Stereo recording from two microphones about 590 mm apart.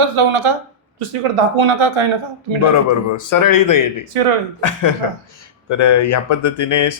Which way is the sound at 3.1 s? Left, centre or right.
Left.